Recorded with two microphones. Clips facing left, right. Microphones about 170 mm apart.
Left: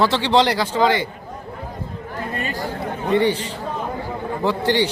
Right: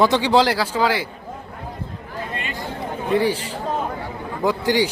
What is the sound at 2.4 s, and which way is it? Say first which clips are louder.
Chatter: left 4 dB; 40° left (ahead or behind).